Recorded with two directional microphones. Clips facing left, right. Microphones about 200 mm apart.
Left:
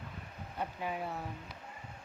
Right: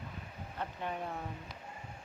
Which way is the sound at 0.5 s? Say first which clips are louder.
Left 1 dB; 5° left (ahead or behind).